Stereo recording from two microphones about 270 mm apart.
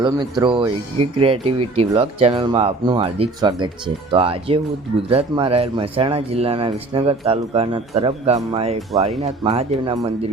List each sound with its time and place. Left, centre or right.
0.0 s speech: centre